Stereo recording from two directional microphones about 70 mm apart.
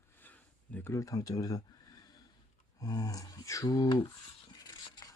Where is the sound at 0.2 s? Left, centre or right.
Left.